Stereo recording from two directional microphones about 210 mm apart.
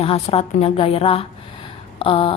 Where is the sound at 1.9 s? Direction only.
25° left (ahead or behind).